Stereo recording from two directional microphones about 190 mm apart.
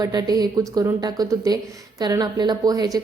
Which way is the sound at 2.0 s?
20° right (ahead or behind).